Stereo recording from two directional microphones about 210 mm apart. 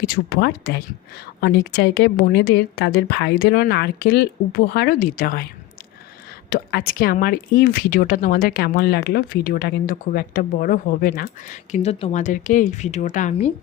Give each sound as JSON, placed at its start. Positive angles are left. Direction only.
{"t": 0.0, "sound": "a woman's voice", "side_deg": 45}
{"t": 6.5, "sound": "speech", "side_deg": 45}